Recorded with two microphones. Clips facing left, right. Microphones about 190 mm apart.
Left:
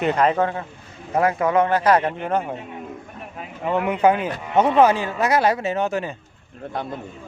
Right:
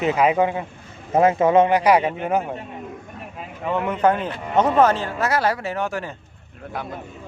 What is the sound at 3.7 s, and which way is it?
Speech, 10° left (ahead or behind).